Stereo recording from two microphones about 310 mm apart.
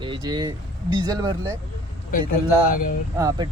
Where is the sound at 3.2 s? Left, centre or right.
Centre.